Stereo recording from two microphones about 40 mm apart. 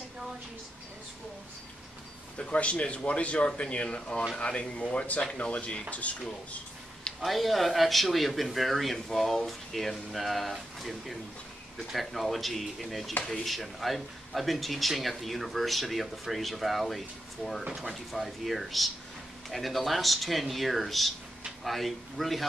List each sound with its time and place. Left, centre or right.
2.3 s speech: left
7.2 s speech: centre